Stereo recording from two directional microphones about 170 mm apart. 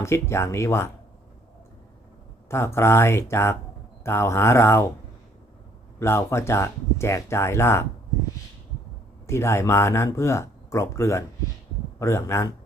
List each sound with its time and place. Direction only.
0.0 s speech: 15° left (ahead or behind)
2.5 s speech: 15° left (ahead or behind)
6.0 s speech: 15° left (ahead or behind)
9.2 s speech: 15° left (ahead or behind)